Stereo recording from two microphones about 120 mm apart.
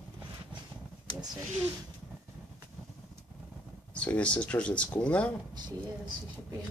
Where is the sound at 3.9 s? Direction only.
10° left (ahead or behind).